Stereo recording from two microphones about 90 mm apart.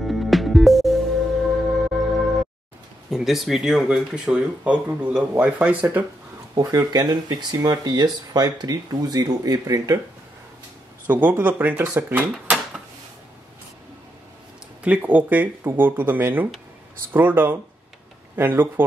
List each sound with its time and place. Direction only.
0.0 s music: centre (ahead or behind)
3.1 s speech: 5° right (ahead or behind)
6.5 s speech: 45° right (ahead or behind)
11.1 s speech: 20° right (ahead or behind)
14.8 s speech: 15° right (ahead or behind)